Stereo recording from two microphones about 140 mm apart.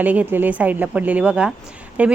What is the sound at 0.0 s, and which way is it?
Speech, 10° right (ahead or behind).